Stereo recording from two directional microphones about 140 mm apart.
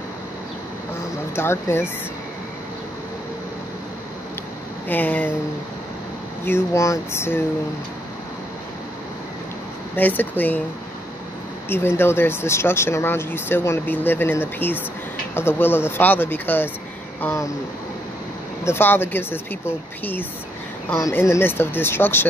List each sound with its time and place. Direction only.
1.3 s speech: 15° left (ahead or behind)
4.8 s speech: 15° left (ahead or behind)
6.4 s speech: 20° left (ahead or behind)
9.9 s speech: 15° left (ahead or behind)
11.7 s speech: 15° left (ahead or behind)
18.6 s speech: 15° left (ahead or behind)